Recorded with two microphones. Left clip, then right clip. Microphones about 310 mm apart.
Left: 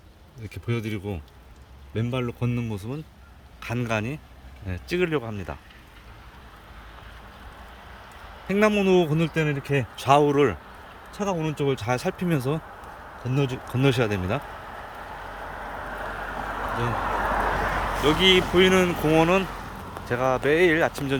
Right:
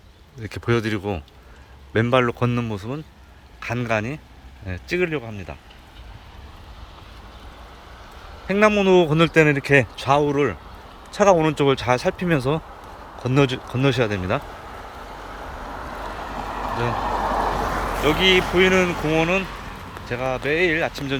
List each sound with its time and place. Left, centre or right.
0.4 s a man's voice: centre
8.4 s a man's voice: centre
10.0 s speech: centre
11.2 s a man's voice: centre
13.7 s a man's voice: centre
14.4 s vehicle: right
18.0 s speech: centre